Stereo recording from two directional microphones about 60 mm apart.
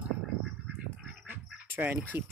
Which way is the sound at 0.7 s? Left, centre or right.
Right.